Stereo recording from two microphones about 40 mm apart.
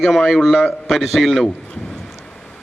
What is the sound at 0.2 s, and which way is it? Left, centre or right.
A man's voice, centre.